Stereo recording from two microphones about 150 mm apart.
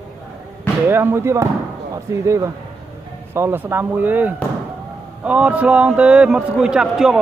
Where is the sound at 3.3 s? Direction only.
15° right (ahead or behind).